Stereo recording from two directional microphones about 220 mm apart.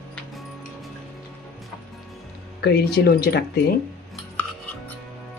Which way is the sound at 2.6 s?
50° left (ahead or behind).